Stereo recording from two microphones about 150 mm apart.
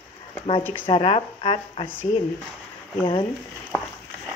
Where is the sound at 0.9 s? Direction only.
40° left (ahead or behind).